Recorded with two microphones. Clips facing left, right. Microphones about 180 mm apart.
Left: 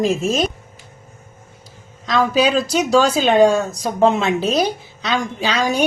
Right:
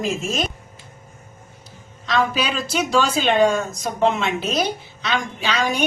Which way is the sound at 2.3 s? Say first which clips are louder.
Left 7 dB; 40° left (ahead or behind).